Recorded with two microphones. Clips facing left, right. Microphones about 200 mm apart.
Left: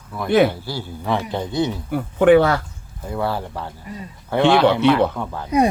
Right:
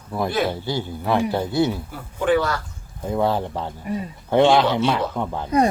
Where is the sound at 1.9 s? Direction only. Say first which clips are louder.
Left 7 dB; 65° left (ahead or behind).